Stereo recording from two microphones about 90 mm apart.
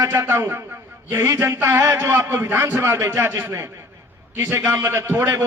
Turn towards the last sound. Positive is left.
turn(degrees=-25)  # may be behind; listen again after turning